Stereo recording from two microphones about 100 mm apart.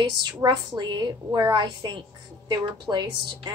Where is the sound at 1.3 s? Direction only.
35° right (ahead or behind).